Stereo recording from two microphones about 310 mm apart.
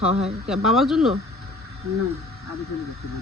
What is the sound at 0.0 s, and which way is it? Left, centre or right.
Speech, centre.